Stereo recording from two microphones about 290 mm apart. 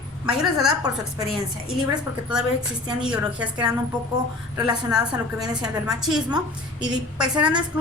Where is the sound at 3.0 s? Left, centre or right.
Centre.